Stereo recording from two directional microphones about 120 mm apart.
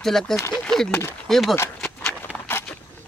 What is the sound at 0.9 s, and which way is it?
Speech, 20° left (ahead or behind).